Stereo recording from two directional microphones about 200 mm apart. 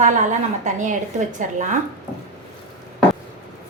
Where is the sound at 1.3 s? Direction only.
40° right (ahead or behind).